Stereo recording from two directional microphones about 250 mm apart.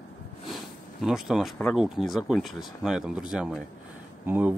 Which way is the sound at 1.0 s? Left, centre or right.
Centre.